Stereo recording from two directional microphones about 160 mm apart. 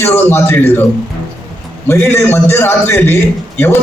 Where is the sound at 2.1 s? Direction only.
15° left (ahead or behind).